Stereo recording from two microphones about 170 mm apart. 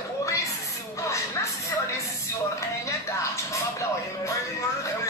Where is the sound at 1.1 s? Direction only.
15° left (ahead or behind).